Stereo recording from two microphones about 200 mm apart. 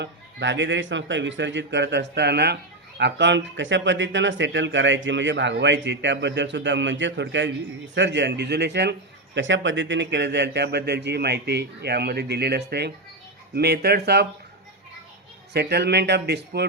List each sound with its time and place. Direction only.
0.0 s a man's voice: 60° right (ahead or behind)
15.5 s a man's voice: 55° right (ahead or behind)